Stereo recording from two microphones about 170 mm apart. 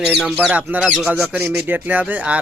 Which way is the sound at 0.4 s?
5° right (ahead or behind).